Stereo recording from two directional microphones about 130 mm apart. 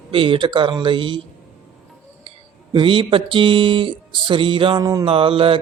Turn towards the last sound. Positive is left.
turn(degrees=-45)  # may be behind; listen again after turning